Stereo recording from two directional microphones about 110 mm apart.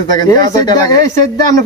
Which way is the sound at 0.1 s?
40° left (ahead or behind).